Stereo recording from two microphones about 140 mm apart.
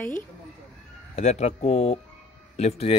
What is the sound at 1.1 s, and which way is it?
Speech, 50° left (ahead or behind).